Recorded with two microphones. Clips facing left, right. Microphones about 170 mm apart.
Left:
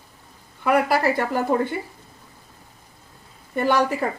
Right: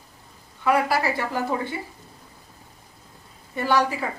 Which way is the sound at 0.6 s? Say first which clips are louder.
Left 2 dB; 50° left (ahead or behind).